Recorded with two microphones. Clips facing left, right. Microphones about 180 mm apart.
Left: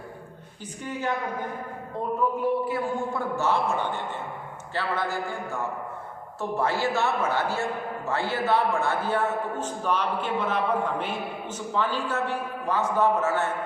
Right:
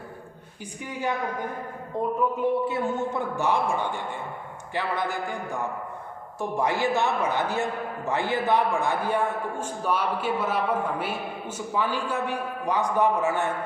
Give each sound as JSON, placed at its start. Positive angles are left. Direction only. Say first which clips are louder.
{"t": 0.8, "sound": "a man's voice", "louder": "even", "side_deg": -15}
{"t": 2.4, "sound": "a man's voice", "louder": "right 1 dB", "side_deg": -25}